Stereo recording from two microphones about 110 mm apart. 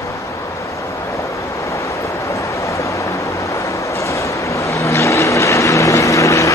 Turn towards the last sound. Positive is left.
turn(degrees=30)  # may be behind; listen again after turning